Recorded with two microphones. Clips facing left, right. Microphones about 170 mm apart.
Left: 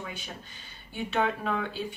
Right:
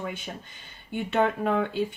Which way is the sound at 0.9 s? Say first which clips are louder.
Right 4 dB; 50° right (ahead or behind).